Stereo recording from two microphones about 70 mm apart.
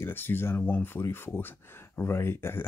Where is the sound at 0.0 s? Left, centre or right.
Left.